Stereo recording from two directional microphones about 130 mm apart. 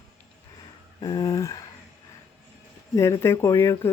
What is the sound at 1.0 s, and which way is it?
Speech, 35° left (ahead or behind).